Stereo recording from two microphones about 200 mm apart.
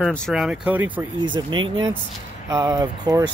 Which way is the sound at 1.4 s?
25° right (ahead or behind).